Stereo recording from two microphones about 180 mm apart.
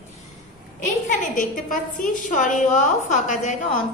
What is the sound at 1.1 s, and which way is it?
A woman's voice, 45° left (ahead or behind).